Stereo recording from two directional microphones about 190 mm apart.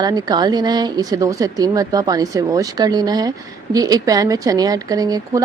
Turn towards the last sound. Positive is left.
turn(degrees=-20)  # may be behind; listen again after turning